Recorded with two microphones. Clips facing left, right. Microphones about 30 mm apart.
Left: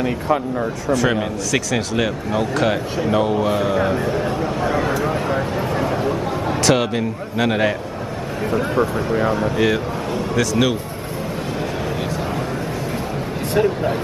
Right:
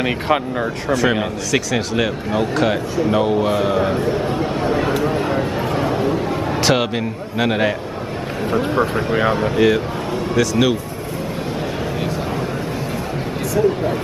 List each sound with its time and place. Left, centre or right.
1.5 s speech: centre
4.4 s speech: right
5.2 s a sound: centre
6.7 s speech: centre
8.5 s speech: right
9.6 s a man's voice: centre
13.6 s speech: left